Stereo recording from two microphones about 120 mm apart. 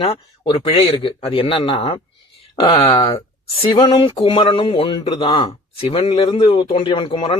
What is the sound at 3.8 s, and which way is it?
Speech, 45° left (ahead or behind).